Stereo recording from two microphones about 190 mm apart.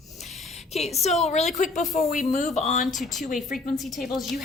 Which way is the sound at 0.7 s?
35° left (ahead or behind).